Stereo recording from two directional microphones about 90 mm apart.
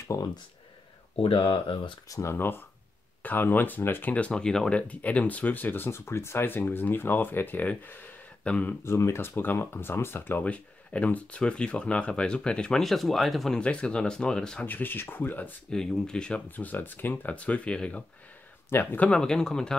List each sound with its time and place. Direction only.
0.0 s speech: 35° left (ahead or behind)
1.1 s speech: 85° left
2.0 s speech: 40° left (ahead or behind)
2.3 s speech: 25° left (ahead or behind)
8.8 s speech: 30° left (ahead or behind); by 14.7 s 10° left (ahead or behind)
14.7 s speech: 20° left (ahead or behind)
15.7 s speech: 5° left (ahead or behind)
16.4 s speech: 20° left (ahead or behind)
18.7 s speech: 25° left (ahead or behind)
19.0 s speech: 10° left (ahead or behind)